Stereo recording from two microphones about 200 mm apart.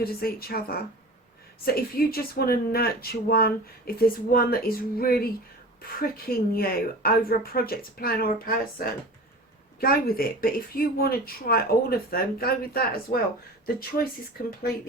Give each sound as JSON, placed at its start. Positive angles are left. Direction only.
{"t": 0.0, "sound": "speech", "side_deg": 50}